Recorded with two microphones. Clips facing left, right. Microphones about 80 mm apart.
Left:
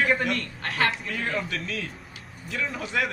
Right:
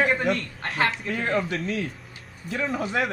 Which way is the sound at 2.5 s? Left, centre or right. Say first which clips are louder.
Right 3 dB; right.